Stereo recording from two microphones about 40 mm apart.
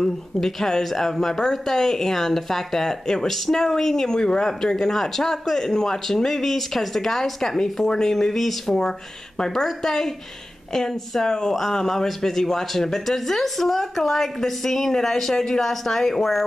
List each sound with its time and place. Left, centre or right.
0.0 s speech: centre